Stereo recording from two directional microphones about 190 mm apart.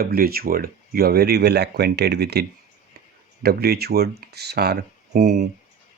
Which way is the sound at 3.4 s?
55° right (ahead or behind).